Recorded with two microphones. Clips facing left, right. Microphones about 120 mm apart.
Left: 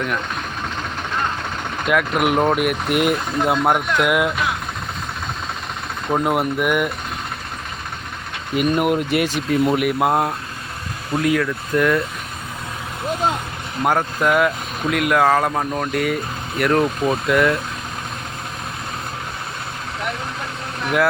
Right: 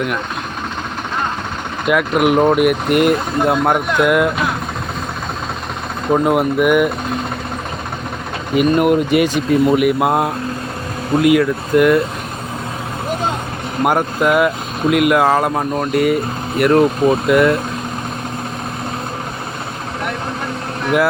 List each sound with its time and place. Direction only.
1.9 s speech: 5° right (ahead or behind)
6.2 s speech: centre (ahead or behind)
8.5 s speech: centre (ahead or behind)
13.8 s speech: 10° right (ahead or behind)